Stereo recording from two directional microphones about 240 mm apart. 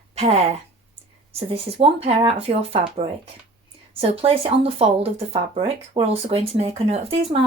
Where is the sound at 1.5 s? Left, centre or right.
Right.